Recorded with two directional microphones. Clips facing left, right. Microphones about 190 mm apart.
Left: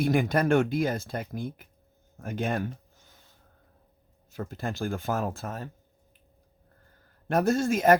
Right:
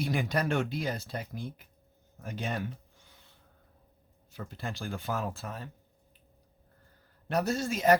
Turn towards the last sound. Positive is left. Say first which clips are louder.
# left 4 dB
turn(degrees=50)  # may be behind; listen again after turning